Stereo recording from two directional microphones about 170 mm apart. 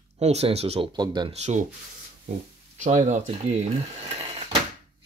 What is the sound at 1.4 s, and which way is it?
Speech, 45° right (ahead or behind).